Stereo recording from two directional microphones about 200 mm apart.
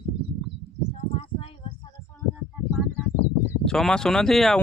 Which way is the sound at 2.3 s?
5° right (ahead or behind).